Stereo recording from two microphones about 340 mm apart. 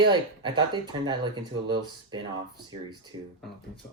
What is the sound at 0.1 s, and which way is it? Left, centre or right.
Speech, centre.